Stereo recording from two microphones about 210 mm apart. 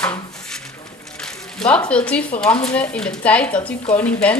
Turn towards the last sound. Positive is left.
turn(degrees=5)  # may be behind; listen again after turning